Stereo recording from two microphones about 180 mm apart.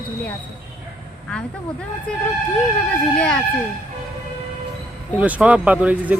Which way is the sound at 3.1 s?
5° left (ahead or behind).